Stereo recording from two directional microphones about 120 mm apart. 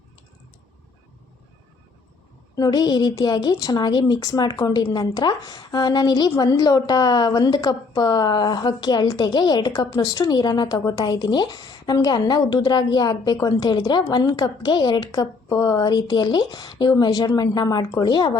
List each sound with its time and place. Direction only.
2.6 s a woman's voice: 35° left (ahead or behind)